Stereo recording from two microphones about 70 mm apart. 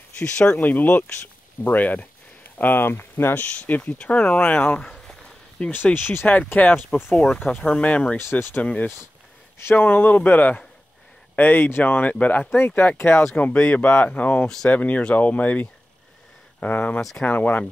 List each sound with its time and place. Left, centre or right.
0.2 s speech: centre; by 3.4 s left
3.4 s speech: left
4.8 s a sound: centre
5.6 s speech: left
5.9 s speech: left
7.2 s speech: centre
7.5 s speech: centre
8.2 s speech: left
8.6 s speech: centre
13.4 s speech: centre